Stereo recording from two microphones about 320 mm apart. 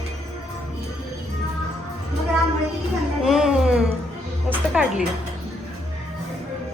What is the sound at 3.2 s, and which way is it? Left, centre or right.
Music, centre.